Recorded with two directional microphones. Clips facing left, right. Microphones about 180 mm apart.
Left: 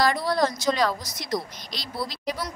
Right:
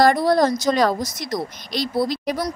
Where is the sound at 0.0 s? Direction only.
50° right (ahead or behind).